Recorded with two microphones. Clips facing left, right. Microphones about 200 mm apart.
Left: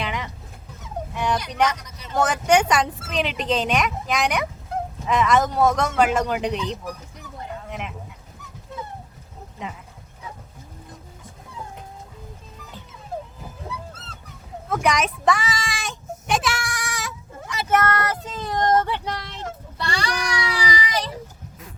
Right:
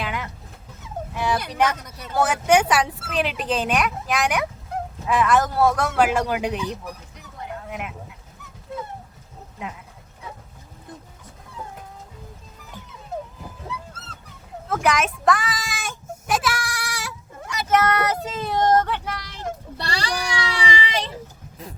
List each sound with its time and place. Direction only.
0.0 s dog: 5° right (ahead or behind)
1.1 s fowl: 5° right (ahead or behind)
1.5 s speech: 5° right (ahead or behind)
7.5 s a sound: 5° right (ahead or behind)
14.7 s speech: centre (ahead or behind)
16.2 s goat: 5° right (ahead or behind)
17.8 s child singing: 10° right (ahead or behind)
19.7 s child singing: 35° right (ahead or behind)